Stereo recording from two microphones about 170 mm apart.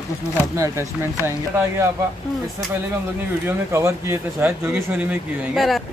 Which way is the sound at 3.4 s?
15° right (ahead or behind).